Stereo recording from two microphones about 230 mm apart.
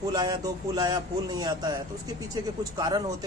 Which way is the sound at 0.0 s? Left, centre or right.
Centre.